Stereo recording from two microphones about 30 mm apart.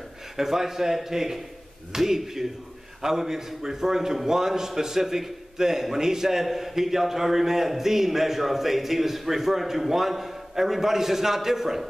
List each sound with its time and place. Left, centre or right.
0.4 s a man's voice: centre